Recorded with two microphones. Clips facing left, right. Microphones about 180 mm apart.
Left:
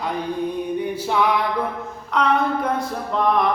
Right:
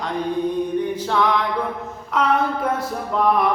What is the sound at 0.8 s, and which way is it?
Music, 10° left (ahead or behind).